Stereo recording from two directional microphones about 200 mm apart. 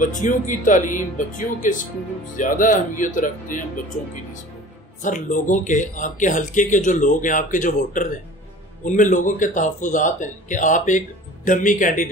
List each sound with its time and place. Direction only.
0.0 s speech: 40° left (ahead or behind)
5.0 s speech: 40° left (ahead or behind)